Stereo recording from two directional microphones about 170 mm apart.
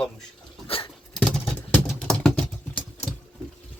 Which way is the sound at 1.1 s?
5° left (ahead or behind).